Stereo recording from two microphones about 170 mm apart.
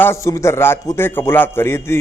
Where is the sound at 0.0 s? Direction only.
15° left (ahead or behind).